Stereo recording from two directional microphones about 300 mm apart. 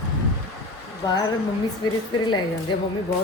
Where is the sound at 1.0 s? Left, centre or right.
Centre.